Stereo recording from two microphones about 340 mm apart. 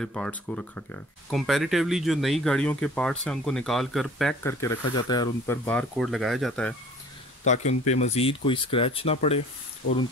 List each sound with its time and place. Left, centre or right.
0.0 s speech: centre
7.4 s speech: left